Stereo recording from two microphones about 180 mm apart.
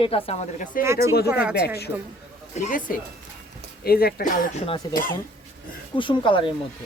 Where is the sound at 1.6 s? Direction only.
65° left (ahead or behind).